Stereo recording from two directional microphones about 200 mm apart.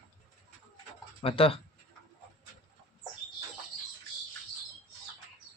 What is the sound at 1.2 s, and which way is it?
Speech, 25° left (ahead or behind).